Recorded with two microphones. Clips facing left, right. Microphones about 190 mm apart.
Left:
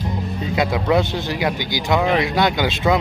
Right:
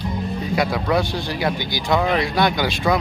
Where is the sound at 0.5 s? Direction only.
20° left (ahead or behind).